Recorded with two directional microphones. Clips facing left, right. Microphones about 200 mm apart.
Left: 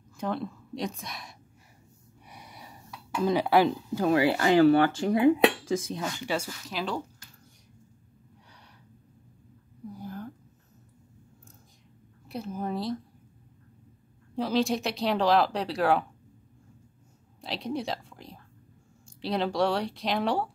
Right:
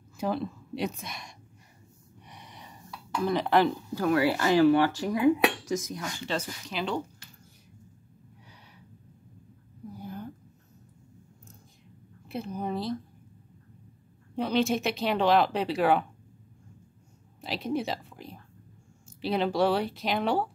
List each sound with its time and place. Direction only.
0.2 s speech: 5° right (ahead or behind)
2.2 s a sound: 10° left (ahead or behind)
3.2 s speech: 20° left (ahead or behind)
6.1 s speech: 10° left (ahead or behind)
9.8 s a sound: centre (ahead or behind)
12.3 s speech: centre (ahead or behind)
14.3 s speech: centre (ahead or behind)
17.4 s speech: centre (ahead or behind)